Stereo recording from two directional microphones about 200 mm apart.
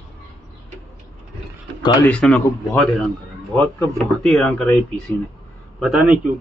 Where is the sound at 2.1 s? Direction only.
5° left (ahead or behind).